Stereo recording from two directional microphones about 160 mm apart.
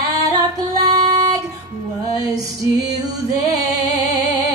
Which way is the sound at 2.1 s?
25° right (ahead or behind).